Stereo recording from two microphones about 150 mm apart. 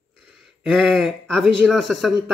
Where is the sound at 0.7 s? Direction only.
Centre (ahead or behind).